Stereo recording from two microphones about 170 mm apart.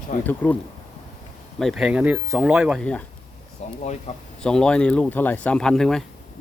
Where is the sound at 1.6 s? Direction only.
Centre (ahead or behind).